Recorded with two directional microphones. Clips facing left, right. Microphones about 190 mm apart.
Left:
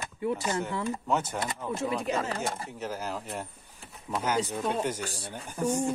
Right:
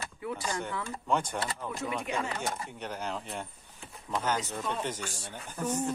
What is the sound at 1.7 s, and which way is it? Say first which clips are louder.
Speech: left 8 dB; 30° left (ahead or behind).